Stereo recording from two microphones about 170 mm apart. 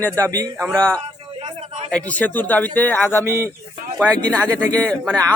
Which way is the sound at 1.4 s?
30° right (ahead or behind).